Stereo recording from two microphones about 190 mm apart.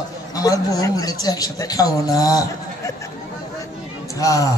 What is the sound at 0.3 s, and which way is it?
Speech, 20° left (ahead or behind).